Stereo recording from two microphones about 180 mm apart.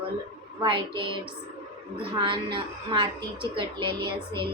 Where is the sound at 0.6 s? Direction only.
25° right (ahead or behind).